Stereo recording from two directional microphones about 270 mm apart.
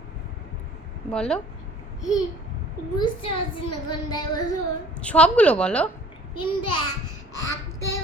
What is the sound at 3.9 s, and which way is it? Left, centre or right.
Speech, centre.